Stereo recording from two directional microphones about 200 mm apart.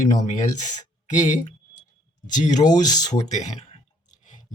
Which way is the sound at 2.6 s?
20° left (ahead or behind).